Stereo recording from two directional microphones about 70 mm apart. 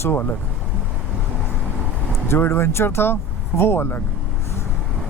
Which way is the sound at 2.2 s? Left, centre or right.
Left.